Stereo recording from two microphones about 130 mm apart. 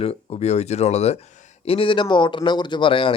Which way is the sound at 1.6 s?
45° left (ahead or behind).